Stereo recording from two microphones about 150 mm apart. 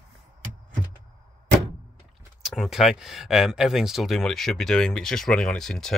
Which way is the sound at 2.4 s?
Centre (ahead or behind).